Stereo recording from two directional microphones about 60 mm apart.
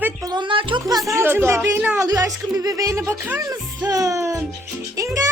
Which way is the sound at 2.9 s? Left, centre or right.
Right.